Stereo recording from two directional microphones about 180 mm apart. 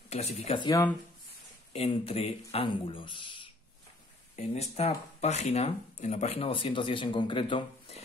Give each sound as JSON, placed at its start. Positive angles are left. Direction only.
{"t": 0.1, "sound": "speech", "side_deg": 35}
{"t": 1.7, "sound": "speech", "side_deg": 30}